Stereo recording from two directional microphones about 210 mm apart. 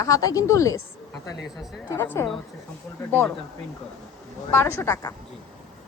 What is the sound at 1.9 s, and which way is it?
Speech, 10° left (ahead or behind).